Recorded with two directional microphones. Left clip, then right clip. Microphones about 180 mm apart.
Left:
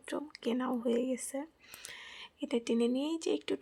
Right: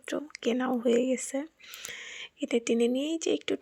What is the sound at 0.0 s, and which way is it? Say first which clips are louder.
Speech: right 6 dB; 15° right (ahead or behind).